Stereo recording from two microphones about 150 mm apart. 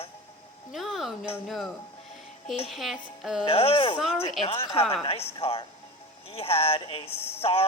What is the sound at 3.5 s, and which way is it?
Speech, 40° left (ahead or behind).